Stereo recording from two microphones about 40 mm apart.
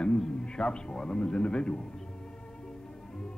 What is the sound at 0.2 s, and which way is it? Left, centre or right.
A man's voice, centre.